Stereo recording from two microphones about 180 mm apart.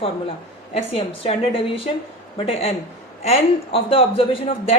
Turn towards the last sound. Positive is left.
turn(degrees=30)  # may be behind; listen again after turning